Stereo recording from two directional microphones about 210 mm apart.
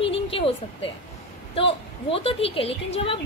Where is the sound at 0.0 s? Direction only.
25° left (ahead or behind).